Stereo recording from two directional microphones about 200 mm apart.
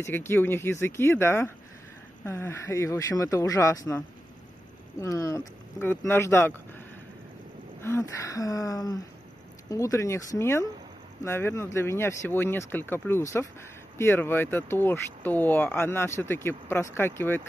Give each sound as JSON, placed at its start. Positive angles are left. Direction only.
{"t": 0.0, "sound": "speech", "side_deg": 10}
{"t": 7.8, "sound": "speech", "side_deg": 15}